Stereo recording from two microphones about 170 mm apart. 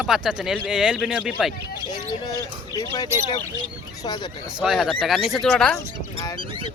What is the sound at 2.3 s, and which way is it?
Speech, 20° left (ahead or behind).